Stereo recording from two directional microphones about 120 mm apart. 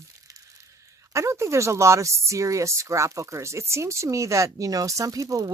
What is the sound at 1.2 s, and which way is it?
Speech, 25° right (ahead or behind).